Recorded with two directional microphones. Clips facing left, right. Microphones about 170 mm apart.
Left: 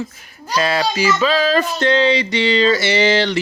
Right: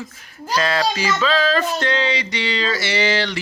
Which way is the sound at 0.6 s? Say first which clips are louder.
Left 3 dB; 10° left (ahead or behind).